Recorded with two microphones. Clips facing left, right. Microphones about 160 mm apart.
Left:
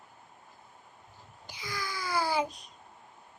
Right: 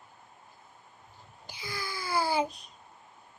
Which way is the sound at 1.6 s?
30° right (ahead or behind).